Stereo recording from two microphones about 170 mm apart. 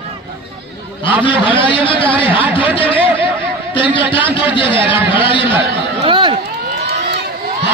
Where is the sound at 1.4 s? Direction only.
30° left (ahead or behind).